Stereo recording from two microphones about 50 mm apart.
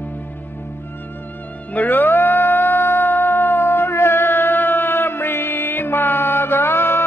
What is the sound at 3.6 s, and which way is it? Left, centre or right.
Music, left.